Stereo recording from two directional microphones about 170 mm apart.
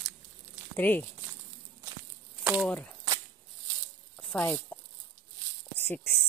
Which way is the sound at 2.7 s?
10° left (ahead or behind).